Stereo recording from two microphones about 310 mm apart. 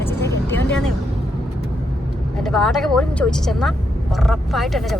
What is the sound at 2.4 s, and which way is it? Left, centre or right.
A woman's voice, centre.